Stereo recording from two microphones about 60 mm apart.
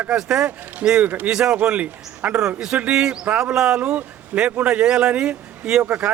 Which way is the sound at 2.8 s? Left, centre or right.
Centre.